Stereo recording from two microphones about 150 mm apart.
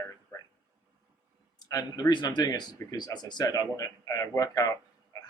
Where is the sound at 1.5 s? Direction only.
25° left (ahead or behind).